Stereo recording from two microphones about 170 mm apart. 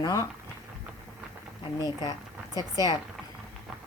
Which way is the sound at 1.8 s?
20° left (ahead or behind).